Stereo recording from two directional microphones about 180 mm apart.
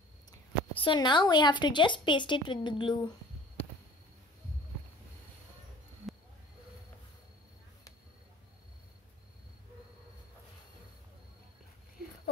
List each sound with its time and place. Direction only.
0.7 s a woman's voice: 25° left (ahead or behind)